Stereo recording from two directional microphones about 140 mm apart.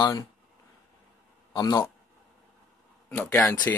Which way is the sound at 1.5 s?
25° left (ahead or behind).